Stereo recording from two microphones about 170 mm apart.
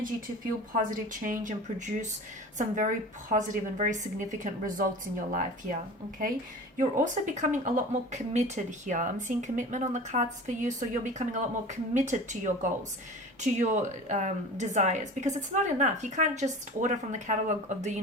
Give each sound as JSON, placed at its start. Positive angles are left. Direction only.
{"t": 0.7, "sound": "speech", "side_deg": -50}
{"t": 6.7, "sound": "speech", "side_deg": -50}